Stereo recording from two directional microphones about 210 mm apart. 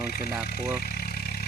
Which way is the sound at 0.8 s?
45° left (ahead or behind).